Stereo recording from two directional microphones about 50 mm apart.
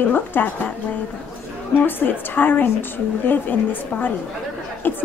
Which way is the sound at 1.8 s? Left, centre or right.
Left.